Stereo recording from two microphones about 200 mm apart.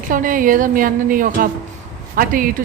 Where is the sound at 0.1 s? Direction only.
40° right (ahead or behind).